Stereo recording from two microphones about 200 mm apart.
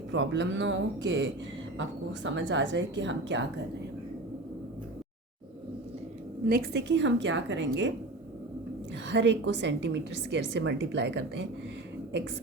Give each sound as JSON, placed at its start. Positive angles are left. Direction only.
{"t": 0.1, "sound": "a woman's voice", "side_deg": -65}
{"t": 6.4, "sound": "a woman's voice", "side_deg": -50}
{"t": 9.0, "sound": "a woman's voice", "side_deg": -60}